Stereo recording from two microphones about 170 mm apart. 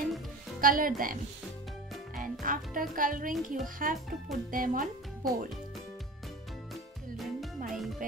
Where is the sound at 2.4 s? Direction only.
55° right (ahead or behind).